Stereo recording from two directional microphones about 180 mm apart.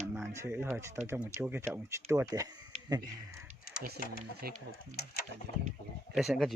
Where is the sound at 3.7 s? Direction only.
55° left (ahead or behind).